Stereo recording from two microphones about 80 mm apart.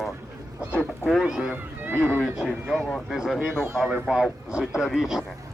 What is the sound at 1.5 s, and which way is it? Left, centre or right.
Speech, right.